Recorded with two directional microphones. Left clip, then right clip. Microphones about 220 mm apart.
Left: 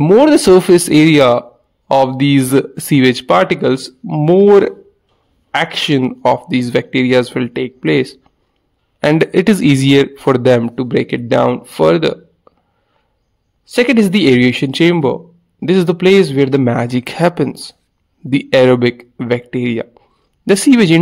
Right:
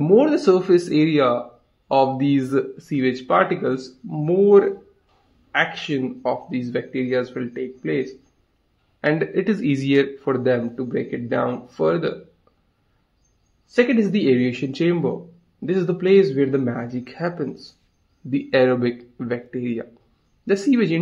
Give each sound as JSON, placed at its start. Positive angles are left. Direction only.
{"t": 0.2, "sound": "a man's voice", "side_deg": 40}
{"t": 12.5, "sound": "a sound", "side_deg": 35}
{"t": 13.7, "sound": "a man's voice", "side_deg": 35}